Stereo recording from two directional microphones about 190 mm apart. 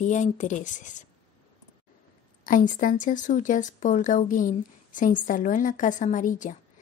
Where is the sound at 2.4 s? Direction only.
45° left (ahead or behind).